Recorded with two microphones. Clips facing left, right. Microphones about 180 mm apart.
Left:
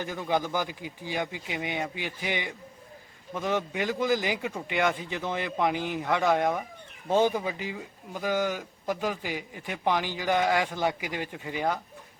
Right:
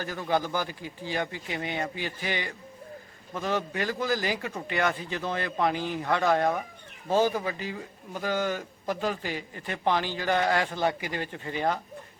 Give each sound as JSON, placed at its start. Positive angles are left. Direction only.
{"t": 0.0, "sound": "a man's voice", "side_deg": 15}